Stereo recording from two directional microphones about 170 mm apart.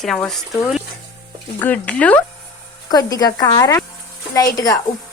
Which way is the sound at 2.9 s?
20° left (ahead or behind).